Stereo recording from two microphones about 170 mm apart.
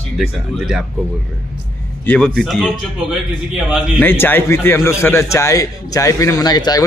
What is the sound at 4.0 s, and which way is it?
A man's voice, 10° left (ahead or behind).